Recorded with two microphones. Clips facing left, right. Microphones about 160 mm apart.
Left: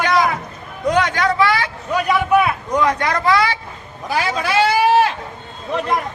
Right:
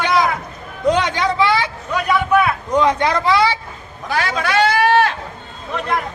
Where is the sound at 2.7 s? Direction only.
25° right (ahead or behind).